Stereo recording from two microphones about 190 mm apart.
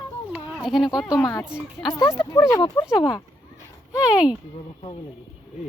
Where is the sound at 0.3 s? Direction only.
Centre (ahead or behind).